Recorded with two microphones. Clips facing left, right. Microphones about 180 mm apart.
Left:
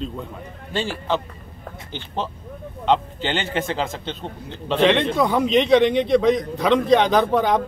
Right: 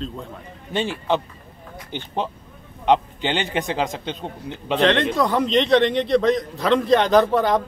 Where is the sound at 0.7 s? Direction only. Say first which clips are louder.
Right 2 dB; 20° right (ahead or behind).